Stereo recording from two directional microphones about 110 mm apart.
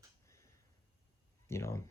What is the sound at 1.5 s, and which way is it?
Speech, 25° left (ahead or behind).